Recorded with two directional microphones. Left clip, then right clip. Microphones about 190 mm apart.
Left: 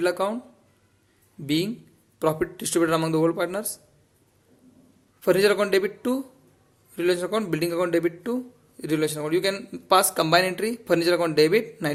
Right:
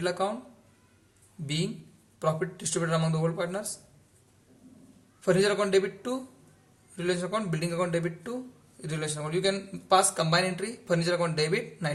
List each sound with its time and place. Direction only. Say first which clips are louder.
0.0 s a man's voice: left 5 dB; 45° left (ahead or behind)
1.5 s a man's voice: left 8 dB; 45° left (ahead or behind)
5.2 s a man's voice: left 5 dB; 45° left (ahead or behind)